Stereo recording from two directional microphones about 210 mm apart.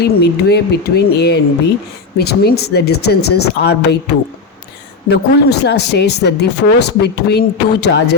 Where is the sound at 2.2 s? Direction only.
50° left (ahead or behind).